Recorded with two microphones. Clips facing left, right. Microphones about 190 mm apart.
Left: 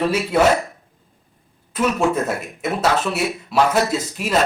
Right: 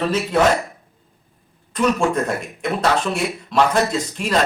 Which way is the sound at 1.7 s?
5° left (ahead or behind).